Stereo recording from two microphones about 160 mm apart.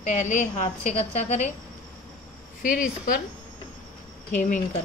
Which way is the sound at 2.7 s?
60° left (ahead or behind).